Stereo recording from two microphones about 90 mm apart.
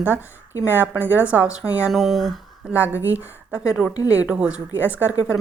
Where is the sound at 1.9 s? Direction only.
Centre (ahead or behind).